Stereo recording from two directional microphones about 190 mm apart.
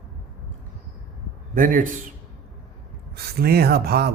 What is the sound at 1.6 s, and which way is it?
Speech, 45° right (ahead or behind).